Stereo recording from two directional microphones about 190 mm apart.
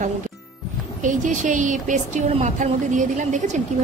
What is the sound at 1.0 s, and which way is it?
Speech, 40° right (ahead or behind).